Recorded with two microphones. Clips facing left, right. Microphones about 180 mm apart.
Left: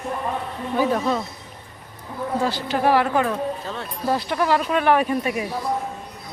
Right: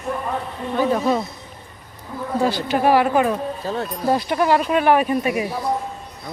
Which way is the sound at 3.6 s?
35° right (ahead or behind).